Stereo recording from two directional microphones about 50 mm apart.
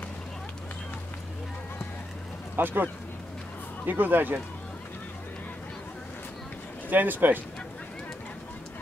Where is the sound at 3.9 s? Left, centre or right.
Right.